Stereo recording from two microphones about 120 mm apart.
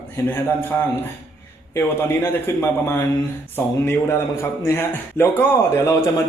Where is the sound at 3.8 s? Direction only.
20° left (ahead or behind).